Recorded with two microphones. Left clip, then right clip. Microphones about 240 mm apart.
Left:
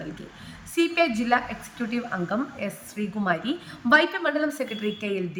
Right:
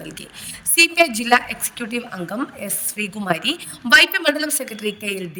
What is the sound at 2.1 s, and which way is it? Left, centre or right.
Speech, centre.